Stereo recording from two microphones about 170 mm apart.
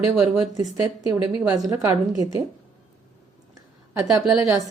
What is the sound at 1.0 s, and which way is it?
A woman's voice, 20° right (ahead or behind).